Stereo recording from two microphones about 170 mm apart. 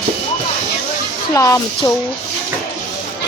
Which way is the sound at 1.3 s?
20° left (ahead or behind).